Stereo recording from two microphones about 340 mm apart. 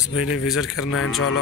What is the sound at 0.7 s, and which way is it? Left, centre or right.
Speech, left.